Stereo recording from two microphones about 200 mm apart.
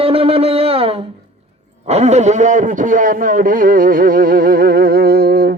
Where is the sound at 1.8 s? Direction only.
35° right (ahead or behind).